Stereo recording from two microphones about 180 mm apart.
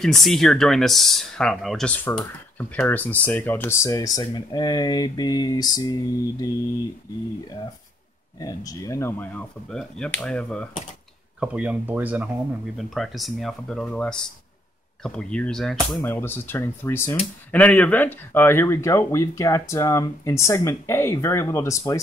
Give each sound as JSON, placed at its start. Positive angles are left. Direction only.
{"t": 0.0, "sound": "speech", "side_deg": 0}
{"t": 8.4, "sound": "speech", "side_deg": 20}
{"t": 11.3, "sound": "speech", "side_deg": -5}
{"t": 16.0, "sound": "speech", "side_deg": 15}